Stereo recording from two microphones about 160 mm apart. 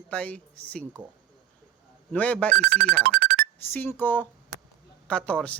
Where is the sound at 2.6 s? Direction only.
85° right.